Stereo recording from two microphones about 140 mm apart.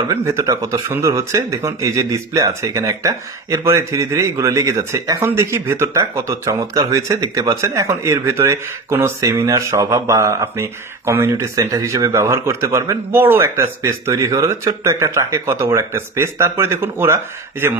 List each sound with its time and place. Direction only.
0.1 s speech: 20° right (ahead or behind)